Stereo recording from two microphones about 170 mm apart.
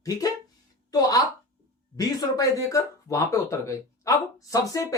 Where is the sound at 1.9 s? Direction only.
20° left (ahead or behind).